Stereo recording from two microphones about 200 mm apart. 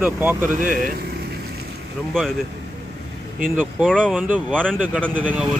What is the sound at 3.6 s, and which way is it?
Speech, 5° left (ahead or behind).